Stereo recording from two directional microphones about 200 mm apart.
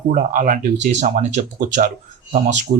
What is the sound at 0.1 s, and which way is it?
Speech, 45° right (ahead or behind).